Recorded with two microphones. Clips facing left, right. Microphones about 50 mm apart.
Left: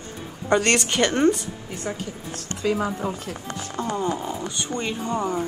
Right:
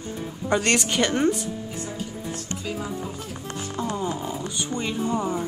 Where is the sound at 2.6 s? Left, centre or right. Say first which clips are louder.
Left 10 dB; left.